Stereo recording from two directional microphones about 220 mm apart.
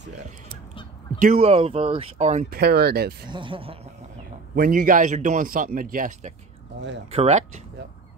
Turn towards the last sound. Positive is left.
turn(degrees=-30)  # may be behind; listen again after turning